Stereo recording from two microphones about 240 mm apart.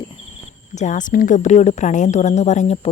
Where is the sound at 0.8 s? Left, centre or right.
Left.